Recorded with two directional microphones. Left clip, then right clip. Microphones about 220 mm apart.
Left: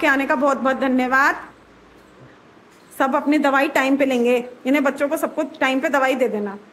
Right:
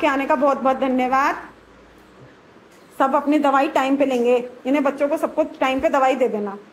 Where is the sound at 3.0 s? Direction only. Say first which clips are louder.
Right 1 dB; 15° left (ahead or behind).